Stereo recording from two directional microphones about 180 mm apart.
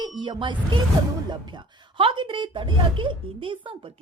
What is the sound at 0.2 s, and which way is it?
A woman's voice, 25° right (ahead or behind).